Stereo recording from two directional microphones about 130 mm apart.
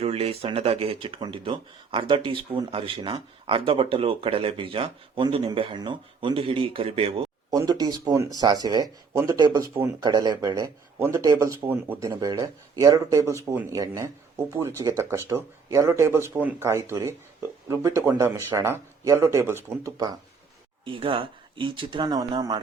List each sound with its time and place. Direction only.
0.0 s speech: 50° right (ahead or behind)
7.5 s speech: 30° right (ahead or behind)
10.0 s speech: 35° right (ahead or behind)
20.8 s speech: 40° right (ahead or behind)